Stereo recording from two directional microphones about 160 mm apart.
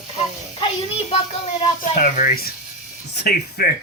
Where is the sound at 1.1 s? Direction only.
40° left (ahead or behind).